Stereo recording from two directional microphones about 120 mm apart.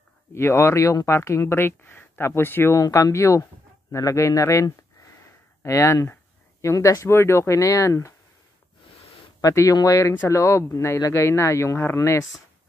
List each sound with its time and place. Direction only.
0.3 s speech: 20° left (ahead or behind)
9.4 s speech: 25° left (ahead or behind)